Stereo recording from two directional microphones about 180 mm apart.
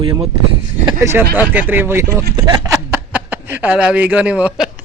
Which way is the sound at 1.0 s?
10° right (ahead or behind).